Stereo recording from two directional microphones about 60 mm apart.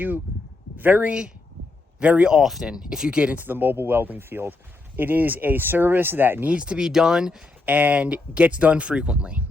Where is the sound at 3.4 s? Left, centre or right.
Right.